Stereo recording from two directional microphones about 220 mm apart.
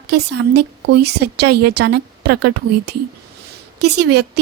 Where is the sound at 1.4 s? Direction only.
90° right.